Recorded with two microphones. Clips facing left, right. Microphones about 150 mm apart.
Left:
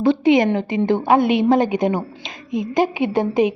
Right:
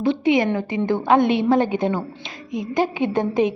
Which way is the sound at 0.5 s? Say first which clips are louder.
Left 3 dB; 20° left (ahead or behind).